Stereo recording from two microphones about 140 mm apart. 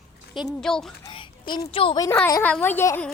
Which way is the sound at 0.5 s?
5° left (ahead or behind).